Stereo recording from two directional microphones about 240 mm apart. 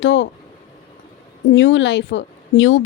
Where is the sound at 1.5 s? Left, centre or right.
Left.